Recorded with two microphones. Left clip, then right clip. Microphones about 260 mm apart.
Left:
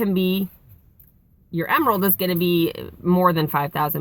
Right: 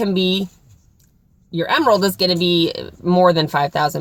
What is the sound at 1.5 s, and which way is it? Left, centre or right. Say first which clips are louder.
Speech: right 4 dB; right.